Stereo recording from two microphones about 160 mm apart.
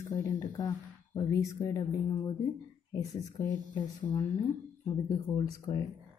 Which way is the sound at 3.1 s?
25° left (ahead or behind).